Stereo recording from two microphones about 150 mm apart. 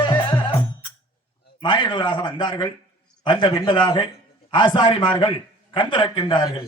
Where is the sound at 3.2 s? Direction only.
35° left (ahead or behind).